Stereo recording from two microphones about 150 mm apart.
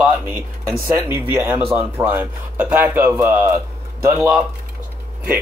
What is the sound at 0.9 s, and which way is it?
Speech, 15° right (ahead or behind).